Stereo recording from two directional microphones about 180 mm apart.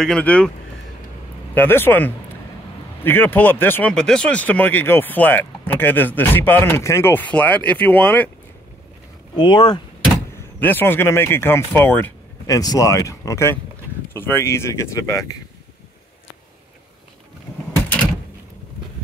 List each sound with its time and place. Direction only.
0.0 s speech: 5° left (ahead or behind)
1.5 s speech: 10° left (ahead or behind)
9.4 s speech: 25° left (ahead or behind)
10.6 s speech: 10° left (ahead or behind)